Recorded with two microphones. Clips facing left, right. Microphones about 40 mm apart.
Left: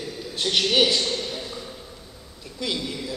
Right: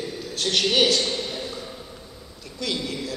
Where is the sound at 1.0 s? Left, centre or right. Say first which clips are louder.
Even; centre.